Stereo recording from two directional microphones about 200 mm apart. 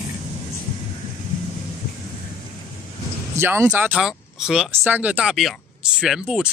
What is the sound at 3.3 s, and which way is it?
Speech, 10° right (ahead or behind).